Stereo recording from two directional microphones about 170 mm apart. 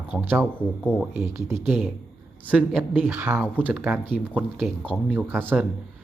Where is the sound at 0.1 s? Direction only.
10° right (ahead or behind).